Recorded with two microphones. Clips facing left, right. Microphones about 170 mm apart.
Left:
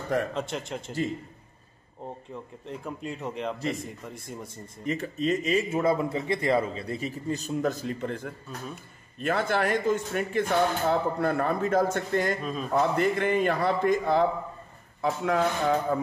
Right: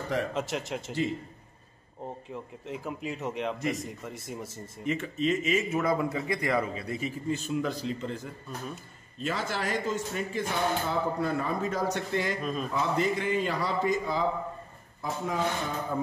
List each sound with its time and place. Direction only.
0.3 s speech: 5° right (ahead or behind)
2.3 s speech: 5° right (ahead or behind)
4.8 s a man's voice: 40° left (ahead or behind)
12.4 s speech: centre (ahead or behind)
12.7 s speech: 55° left (ahead or behind)
15.0 s speech: 70° left (ahead or behind)